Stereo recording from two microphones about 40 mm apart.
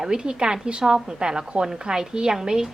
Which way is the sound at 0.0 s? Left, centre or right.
Right.